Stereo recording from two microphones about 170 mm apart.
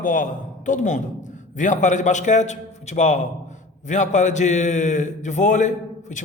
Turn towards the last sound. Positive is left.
turn(degrees=45)  # may be behind; listen again after turning